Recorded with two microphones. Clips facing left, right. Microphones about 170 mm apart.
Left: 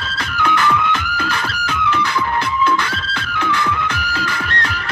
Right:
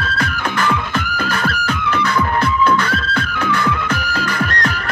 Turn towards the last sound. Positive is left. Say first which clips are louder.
# right 3 dB
turn(degrees=-45)  # may be behind; listen again after turning